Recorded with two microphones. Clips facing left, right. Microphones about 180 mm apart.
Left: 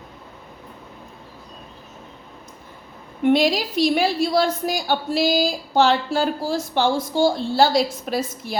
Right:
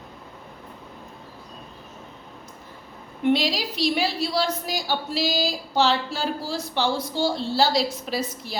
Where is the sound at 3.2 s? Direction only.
50° left (ahead or behind).